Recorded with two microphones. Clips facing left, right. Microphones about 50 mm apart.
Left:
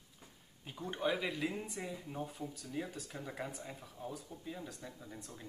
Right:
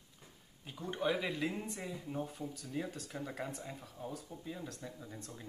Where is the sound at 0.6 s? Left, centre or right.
Centre.